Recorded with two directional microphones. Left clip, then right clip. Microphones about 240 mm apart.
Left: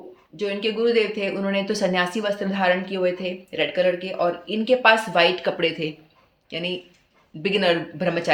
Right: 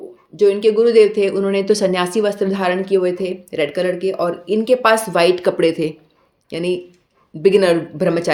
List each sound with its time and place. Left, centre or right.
0.3 s speech: right